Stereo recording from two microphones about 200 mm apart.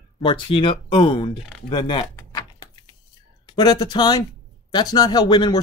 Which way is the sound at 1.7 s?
20° left (ahead or behind).